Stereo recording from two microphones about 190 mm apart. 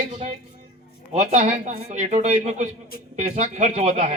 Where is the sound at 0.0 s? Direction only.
35° right (ahead or behind).